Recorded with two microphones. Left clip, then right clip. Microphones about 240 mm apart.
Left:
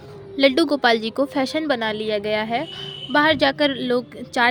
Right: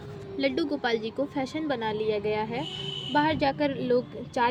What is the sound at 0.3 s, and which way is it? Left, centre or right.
A woman's voice, left.